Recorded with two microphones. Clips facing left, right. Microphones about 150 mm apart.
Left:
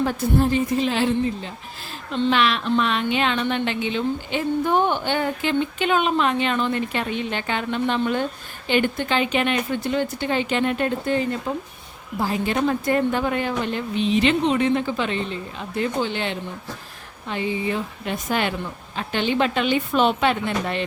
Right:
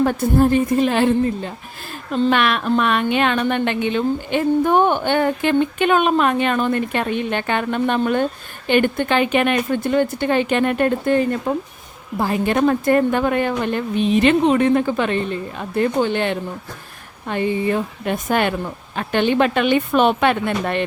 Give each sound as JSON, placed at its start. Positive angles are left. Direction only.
{"t": 0.0, "sound": "a woman's voice", "side_deg": -50}